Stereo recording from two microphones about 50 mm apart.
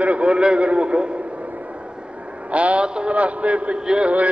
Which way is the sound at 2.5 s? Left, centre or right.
Right.